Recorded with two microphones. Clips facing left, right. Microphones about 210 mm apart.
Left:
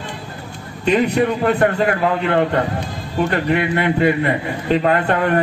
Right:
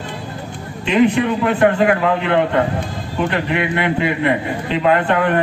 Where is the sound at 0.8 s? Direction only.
40° left (ahead or behind).